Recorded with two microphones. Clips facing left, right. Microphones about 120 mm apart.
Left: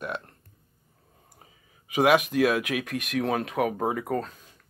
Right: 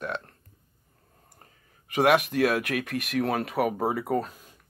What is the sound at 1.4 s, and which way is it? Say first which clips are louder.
Speech: left 1 dB; centre (ahead or behind).